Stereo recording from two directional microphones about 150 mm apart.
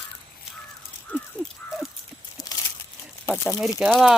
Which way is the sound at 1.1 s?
10° left (ahead or behind).